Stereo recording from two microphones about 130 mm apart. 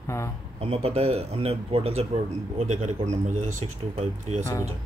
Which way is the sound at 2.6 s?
60° right (ahead or behind).